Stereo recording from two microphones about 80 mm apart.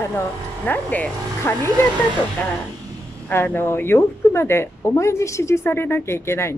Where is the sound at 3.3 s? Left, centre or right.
Left.